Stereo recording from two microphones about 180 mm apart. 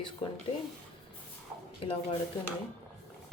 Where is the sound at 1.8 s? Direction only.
30° left (ahead or behind).